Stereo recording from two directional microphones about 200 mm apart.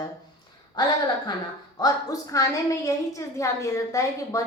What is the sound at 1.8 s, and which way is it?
A woman's voice, 15° left (ahead or behind).